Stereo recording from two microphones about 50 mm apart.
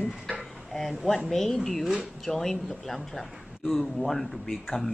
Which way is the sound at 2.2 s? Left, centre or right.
Centre.